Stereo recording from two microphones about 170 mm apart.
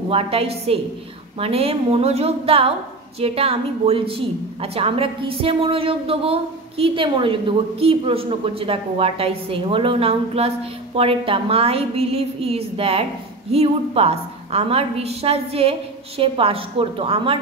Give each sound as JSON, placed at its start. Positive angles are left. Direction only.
{"t": 0.1, "sound": "a woman's voice", "side_deg": -35}